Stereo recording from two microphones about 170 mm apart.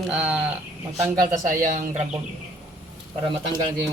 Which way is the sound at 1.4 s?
50° right (ahead or behind).